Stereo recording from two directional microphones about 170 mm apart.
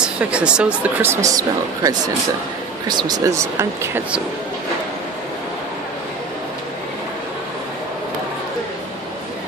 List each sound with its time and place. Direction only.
0.0 s speech: 5° right (ahead or behind)